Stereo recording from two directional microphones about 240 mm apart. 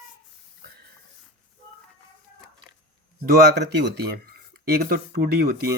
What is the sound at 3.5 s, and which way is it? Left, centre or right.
Speech, right.